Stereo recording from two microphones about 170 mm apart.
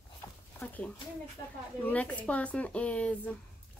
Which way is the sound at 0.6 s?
10° left (ahead or behind).